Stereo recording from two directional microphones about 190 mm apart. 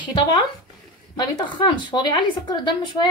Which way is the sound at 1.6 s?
25° left (ahead or behind).